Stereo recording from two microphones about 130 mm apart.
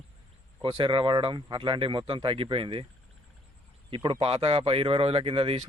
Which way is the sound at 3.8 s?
40° right (ahead or behind).